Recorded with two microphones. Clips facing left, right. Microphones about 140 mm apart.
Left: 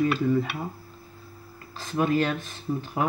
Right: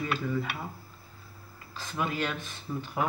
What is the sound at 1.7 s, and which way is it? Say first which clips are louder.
Speech: left 8 dB; 40° left (ahead or behind).